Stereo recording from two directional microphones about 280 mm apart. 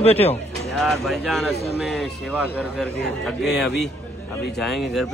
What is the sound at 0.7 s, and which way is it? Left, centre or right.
Speech, centre.